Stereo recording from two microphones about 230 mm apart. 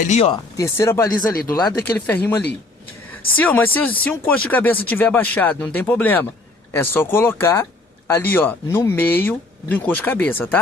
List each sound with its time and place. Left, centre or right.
0.1 s speech: left
0.5 s speech: centre
2.0 s speech: centre
3.3 s speech: centre